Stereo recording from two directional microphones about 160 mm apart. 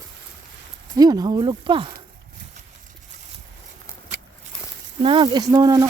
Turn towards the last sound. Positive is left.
turn(degrees=-25)  # may be behind; listen again after turning